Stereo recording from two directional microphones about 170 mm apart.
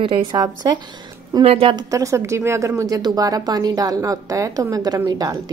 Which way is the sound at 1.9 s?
20° right (ahead or behind).